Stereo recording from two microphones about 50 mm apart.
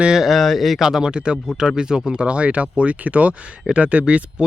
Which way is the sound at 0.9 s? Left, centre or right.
Centre.